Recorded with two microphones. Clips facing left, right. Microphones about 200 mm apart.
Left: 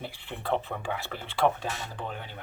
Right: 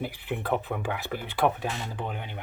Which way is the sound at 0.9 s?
15° right (ahead or behind).